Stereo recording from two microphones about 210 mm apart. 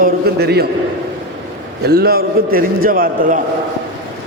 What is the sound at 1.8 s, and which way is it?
A man's voice, 45° right (ahead or behind).